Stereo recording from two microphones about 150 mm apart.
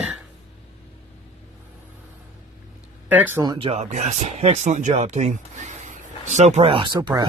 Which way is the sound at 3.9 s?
45° right (ahead or behind).